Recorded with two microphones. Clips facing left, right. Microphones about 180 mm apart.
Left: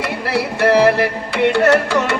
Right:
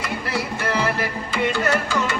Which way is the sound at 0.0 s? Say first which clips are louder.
Left 6 dB; 70° left (ahead or behind).